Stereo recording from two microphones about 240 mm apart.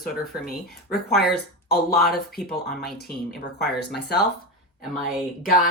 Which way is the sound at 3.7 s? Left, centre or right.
Left.